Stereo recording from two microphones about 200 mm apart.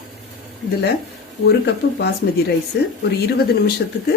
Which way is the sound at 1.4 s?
55° left (ahead or behind).